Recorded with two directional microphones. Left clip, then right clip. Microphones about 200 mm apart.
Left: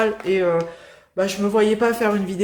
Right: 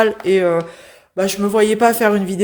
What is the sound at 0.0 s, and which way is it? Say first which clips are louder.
A man's voice: right 5 dB; 45° right (ahead or behind).